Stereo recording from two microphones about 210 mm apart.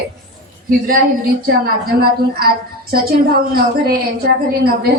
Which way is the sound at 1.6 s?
45° right (ahead or behind).